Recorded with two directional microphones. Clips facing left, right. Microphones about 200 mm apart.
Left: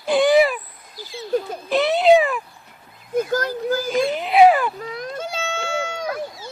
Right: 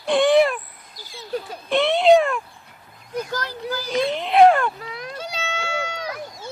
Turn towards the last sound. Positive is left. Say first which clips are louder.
# left 3 dB
turn(degrees=45)  # may be behind; listen again after turning